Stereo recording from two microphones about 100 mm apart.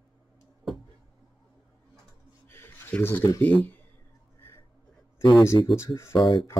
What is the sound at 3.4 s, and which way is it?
Speech, 15° left (ahead or behind).